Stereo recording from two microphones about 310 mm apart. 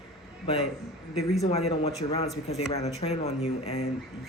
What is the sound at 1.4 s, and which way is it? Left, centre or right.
A man's voice, centre.